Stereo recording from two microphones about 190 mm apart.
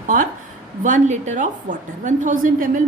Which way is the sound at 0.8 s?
40° right (ahead or behind).